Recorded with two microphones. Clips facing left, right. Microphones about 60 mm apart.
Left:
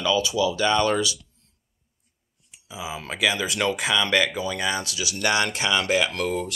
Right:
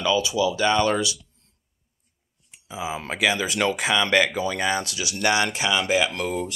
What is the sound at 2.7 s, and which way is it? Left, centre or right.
Speech, right.